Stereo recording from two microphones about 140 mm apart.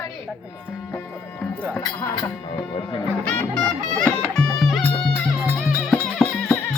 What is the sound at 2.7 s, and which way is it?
Speech, 35° left (ahead or behind).